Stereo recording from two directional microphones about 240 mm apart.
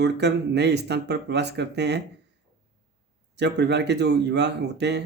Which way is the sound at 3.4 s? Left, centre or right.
Right.